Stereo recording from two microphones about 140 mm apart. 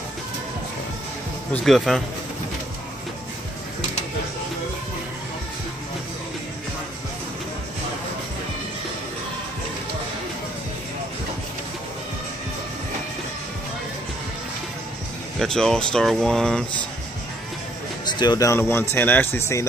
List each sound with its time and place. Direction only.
1.6 s speech: centre (ahead or behind)
15.3 s speech: 5° left (ahead or behind)
18.2 s speech: 25° left (ahead or behind)